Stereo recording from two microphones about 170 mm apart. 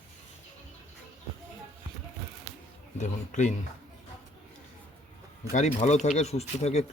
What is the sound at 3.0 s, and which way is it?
Speech, 45° left (ahead or behind).